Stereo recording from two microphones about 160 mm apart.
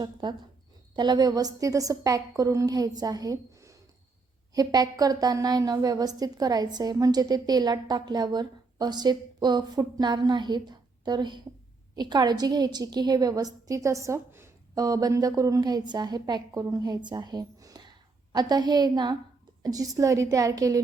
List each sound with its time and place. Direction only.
0.0 s a woman's voice: 30° right (ahead or behind)